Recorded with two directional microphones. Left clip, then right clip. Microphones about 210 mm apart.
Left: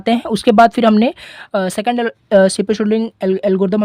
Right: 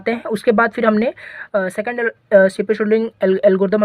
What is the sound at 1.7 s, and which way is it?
Speech, 40° left (ahead or behind).